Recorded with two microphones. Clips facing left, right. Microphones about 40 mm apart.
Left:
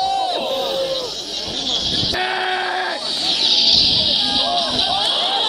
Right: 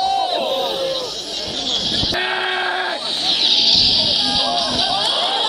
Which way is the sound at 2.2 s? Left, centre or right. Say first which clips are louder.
Left 1 dB; right.